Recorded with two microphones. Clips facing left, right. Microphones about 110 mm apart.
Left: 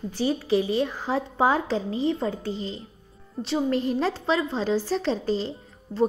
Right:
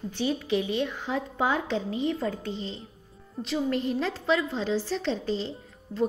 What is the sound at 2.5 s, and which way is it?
Speech, 40° left (ahead or behind).